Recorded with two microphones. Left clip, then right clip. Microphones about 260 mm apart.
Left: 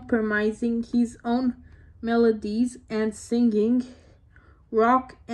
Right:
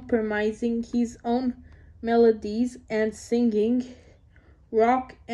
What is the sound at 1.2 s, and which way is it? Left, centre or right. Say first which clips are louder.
Speech: even; left.